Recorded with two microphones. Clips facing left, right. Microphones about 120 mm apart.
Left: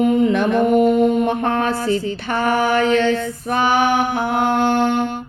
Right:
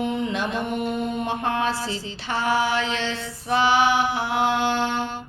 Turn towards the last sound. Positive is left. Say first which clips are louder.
# left 7 dB
turn(degrees=50)  # may be behind; listen again after turning